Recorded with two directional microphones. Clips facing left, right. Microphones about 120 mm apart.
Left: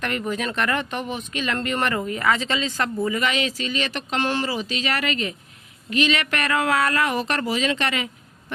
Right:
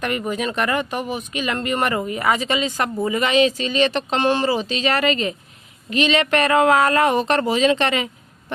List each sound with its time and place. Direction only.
0.0 s speech: 10° right (ahead or behind); by 8.5 s 25° right (ahead or behind)